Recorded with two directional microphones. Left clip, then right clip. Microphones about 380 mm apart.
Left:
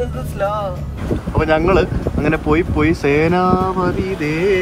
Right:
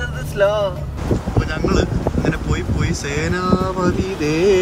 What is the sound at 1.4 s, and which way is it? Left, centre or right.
Speech, centre.